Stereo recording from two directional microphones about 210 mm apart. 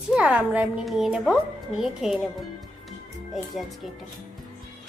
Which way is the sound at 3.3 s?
Centre (ahead or behind).